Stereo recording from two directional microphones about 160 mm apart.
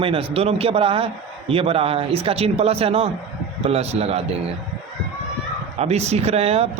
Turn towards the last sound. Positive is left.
turn(degrees=-40)  # may be behind; listen again after turning